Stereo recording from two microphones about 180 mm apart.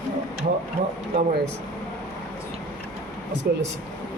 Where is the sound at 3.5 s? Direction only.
60° right (ahead or behind).